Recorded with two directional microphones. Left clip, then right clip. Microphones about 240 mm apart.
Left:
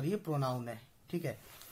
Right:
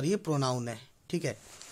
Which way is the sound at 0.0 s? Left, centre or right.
Right.